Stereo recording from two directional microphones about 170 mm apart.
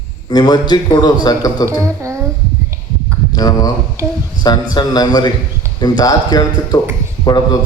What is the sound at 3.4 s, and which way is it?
Speech, 20° left (ahead or behind).